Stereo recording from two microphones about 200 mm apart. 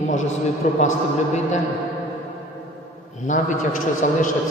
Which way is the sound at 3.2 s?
40° left (ahead or behind).